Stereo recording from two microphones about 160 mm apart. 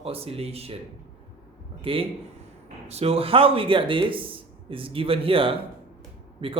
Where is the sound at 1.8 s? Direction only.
35° right (ahead or behind).